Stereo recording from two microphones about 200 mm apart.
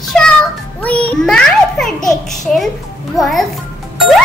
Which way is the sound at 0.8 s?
5° left (ahead or behind).